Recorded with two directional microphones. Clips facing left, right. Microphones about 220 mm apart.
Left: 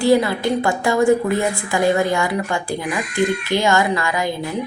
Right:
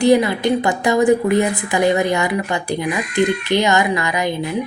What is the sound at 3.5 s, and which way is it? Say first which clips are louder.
Speech: right 1 dB; 20° right (ahead or behind).